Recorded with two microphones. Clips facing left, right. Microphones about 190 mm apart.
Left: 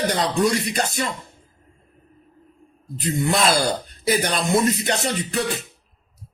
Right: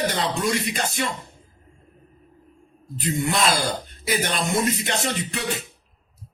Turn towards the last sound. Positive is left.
turn(degrees=40)  # may be behind; listen again after turning